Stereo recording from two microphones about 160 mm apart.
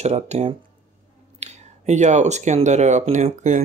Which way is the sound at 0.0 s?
45° right (ahead or behind).